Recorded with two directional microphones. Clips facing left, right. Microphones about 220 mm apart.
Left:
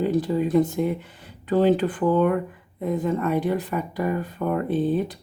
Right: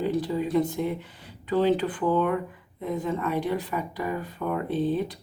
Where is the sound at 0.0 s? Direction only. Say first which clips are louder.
Left 4 dB; 45° left (ahead or behind).